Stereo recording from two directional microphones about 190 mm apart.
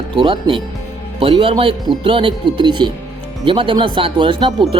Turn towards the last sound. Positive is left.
turn(degrees=-25)  # may be behind; listen again after turning